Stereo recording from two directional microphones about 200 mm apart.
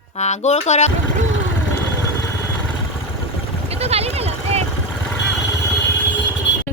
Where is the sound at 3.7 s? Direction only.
30° right (ahead or behind).